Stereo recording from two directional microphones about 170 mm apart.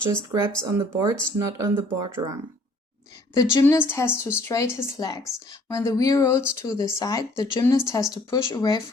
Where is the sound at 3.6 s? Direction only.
15° left (ahead or behind).